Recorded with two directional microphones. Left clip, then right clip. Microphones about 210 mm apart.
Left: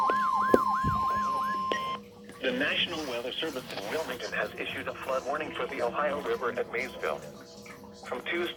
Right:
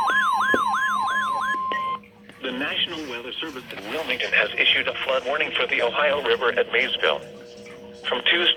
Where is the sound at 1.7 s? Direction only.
55° left (ahead or behind).